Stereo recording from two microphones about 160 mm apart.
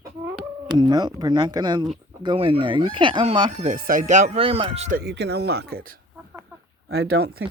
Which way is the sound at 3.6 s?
55° right (ahead or behind).